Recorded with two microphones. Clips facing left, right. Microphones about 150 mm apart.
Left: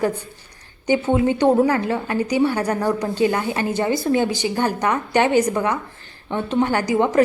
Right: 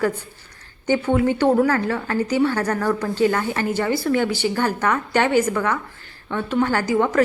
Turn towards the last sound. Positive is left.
turn(degrees=20)  # may be behind; listen again after turning